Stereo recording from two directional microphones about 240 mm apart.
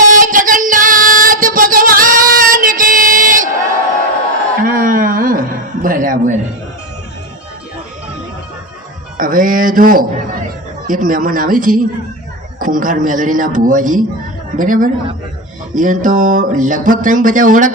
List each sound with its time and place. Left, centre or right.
0.0 s music: right
4.6 s a sound: right
9.1 s speech: right